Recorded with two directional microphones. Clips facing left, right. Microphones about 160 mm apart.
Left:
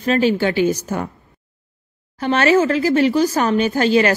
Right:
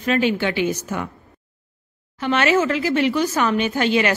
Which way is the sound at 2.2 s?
40° left (ahead or behind).